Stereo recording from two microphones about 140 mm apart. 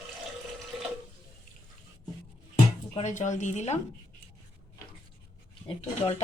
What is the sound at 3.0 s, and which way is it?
Speech, 60° left (ahead or behind).